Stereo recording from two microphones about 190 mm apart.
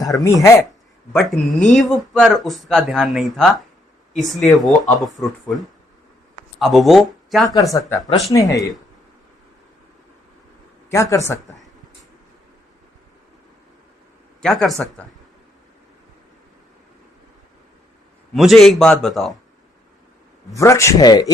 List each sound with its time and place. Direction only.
0.0 s speech: 20° left (ahead or behind)
1.2 s speech: centre (ahead or behind)
7.4 s speech: 20° left (ahead or behind)
10.9 s speech: 15° left (ahead or behind)
14.4 s speech: 5° left (ahead or behind)
18.3 s speech: centre (ahead or behind)
20.5 s speech: 15° left (ahead or behind)